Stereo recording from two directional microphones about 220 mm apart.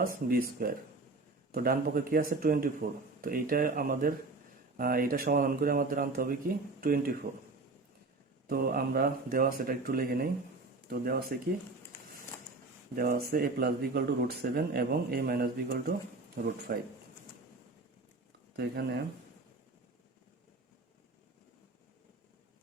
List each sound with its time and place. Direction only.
0.0 s speech: 40° right (ahead or behind)
8.4 s speech: 40° right (ahead or behind)
13.0 s speech: 45° right (ahead or behind)
18.5 s speech: 50° right (ahead or behind)